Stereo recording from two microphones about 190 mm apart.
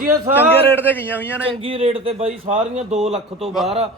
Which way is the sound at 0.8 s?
10° left (ahead or behind).